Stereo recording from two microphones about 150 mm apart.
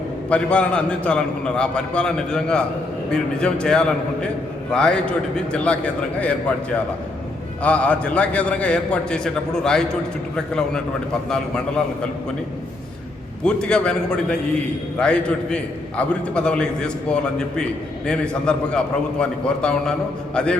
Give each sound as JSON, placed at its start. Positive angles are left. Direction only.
{"t": 0.3, "sound": "a man's voice", "side_deg": 10}
{"t": 7.6, "sound": "a man's voice", "side_deg": 10}
{"t": 13.4, "sound": "a man's voice", "side_deg": 5}